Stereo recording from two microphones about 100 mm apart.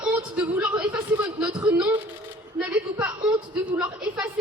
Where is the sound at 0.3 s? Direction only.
15° right (ahead or behind).